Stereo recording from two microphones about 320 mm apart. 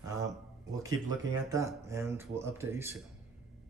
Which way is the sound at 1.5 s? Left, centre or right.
Centre.